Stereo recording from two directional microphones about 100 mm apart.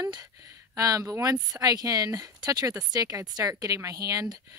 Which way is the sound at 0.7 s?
35° right (ahead or behind).